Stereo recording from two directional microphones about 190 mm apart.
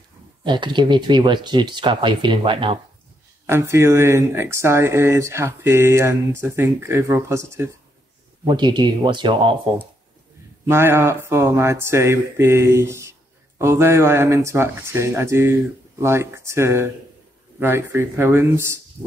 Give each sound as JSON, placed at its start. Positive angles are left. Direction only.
{"t": 0.4, "sound": "speech", "side_deg": -25}
{"t": 3.4, "sound": "speech", "side_deg": -15}
{"t": 8.5, "sound": "speech", "side_deg": -25}
{"t": 10.7, "sound": "speech", "side_deg": -15}